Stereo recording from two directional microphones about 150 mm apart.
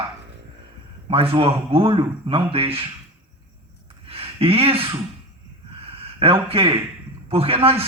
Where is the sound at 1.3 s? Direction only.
35° right (ahead or behind).